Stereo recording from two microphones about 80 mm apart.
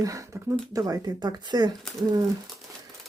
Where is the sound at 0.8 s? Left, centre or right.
Right.